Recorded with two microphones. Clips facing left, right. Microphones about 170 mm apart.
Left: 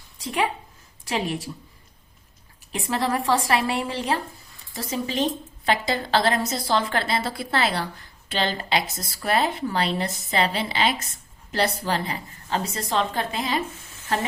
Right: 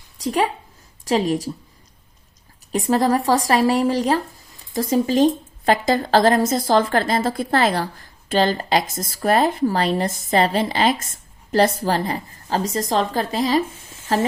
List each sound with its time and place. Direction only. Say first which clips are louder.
0.2 s a woman's voice: right 5 dB; 40° right (ahead or behind)
2.7 s a woman's voice: right 7 dB; 40° right (ahead or behind)